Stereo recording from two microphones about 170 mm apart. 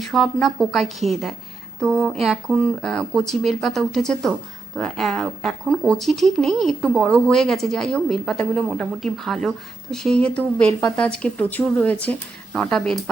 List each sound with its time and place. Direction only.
0.0 s speech: centre (ahead or behind)